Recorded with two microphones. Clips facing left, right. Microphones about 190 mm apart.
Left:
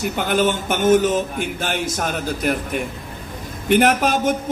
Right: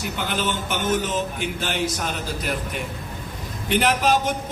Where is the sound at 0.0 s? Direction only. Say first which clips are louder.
Left 7 dB; 50° left (ahead or behind).